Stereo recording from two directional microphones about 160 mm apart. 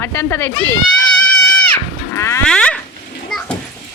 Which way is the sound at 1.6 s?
15° left (ahead or behind).